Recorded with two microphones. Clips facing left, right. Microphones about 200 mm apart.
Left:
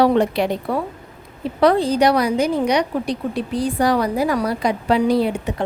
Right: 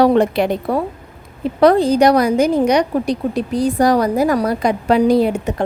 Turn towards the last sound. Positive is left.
turn(degrees=-45)  # may be behind; listen again after turning